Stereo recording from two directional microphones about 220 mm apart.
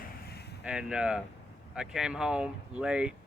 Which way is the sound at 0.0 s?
45° left (ahead or behind).